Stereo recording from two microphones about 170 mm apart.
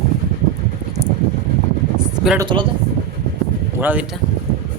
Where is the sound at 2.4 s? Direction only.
30° right (ahead or behind).